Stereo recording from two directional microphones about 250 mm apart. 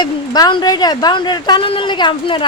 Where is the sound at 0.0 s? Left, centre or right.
Centre.